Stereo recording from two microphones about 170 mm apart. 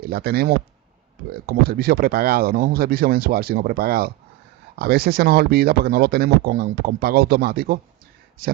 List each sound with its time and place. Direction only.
0.0 s speech: 65° right (ahead or behind)